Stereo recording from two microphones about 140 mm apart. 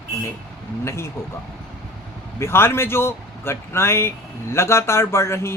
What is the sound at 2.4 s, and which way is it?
Speech, 15° left (ahead or behind).